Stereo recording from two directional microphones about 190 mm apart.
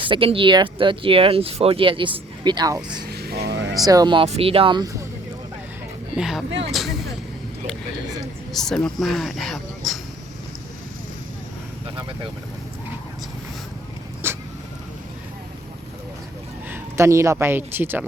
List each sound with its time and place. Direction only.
0.0 s speech: 25° right (ahead or behind)
3.1 s vehicle: 55° right (ahead or behind)
3.8 s speech: 20° right (ahead or behind)
6.1 s speech: centre (ahead or behind)
6.7 s vehicle: centre (ahead or behind)
8.5 s speech: 5° left (ahead or behind)
11.9 s vehicle: 25° right (ahead or behind)
14.2 s vehicle: 10° right (ahead or behind)
16.6 s speech: 10° right (ahead or behind)